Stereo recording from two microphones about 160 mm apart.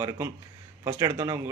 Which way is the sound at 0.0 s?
25° right (ahead or behind).